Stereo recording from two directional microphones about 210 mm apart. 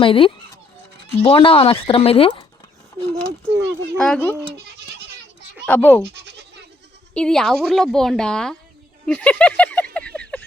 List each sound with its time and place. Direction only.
0.0 s speech: 25° left (ahead or behind)
3.0 s a child's voice: 25° right (ahead or behind)
3.9 s a woman's voice: 5° left (ahead or behind)
5.6 s speech: 10° left (ahead or behind)
7.1 s a woman's voice: 5° left (ahead or behind)
9.0 s a sound: 5° left (ahead or behind)